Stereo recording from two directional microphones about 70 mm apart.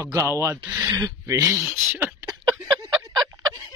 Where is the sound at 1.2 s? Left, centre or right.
Right.